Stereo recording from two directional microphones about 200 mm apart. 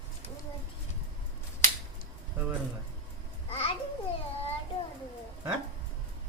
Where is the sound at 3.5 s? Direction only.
30° left (ahead or behind).